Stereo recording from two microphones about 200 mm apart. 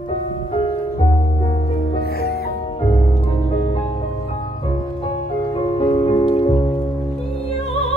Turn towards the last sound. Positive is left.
turn(degrees=25)  # may be behind; listen again after turning